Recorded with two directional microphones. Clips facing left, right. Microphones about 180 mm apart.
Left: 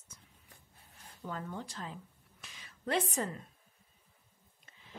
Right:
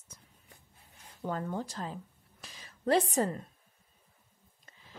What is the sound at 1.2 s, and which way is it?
A woman's voice, 40° right (ahead or behind).